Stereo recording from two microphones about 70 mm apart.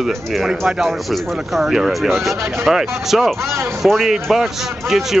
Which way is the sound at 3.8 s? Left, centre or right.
Centre.